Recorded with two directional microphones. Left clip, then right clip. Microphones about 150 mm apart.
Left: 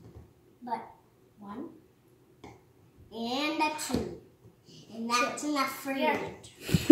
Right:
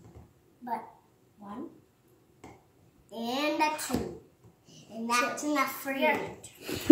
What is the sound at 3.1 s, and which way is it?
Speech, centre (ahead or behind).